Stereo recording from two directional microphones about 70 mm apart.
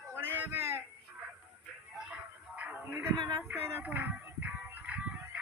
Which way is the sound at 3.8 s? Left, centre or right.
Right.